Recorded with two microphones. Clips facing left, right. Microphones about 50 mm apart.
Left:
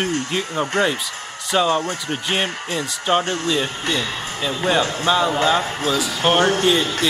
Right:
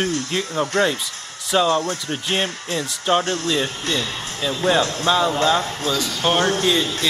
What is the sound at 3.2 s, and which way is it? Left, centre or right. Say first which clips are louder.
Speech: even; left.